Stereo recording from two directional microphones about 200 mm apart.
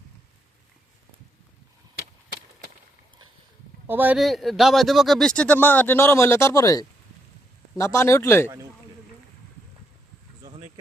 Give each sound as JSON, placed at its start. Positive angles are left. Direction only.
{"t": 3.8, "sound": "a man's voice", "side_deg": -10}
{"t": 10.4, "sound": "bee", "side_deg": -30}